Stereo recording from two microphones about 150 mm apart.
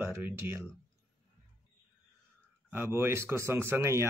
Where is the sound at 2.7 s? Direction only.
15° right (ahead or behind).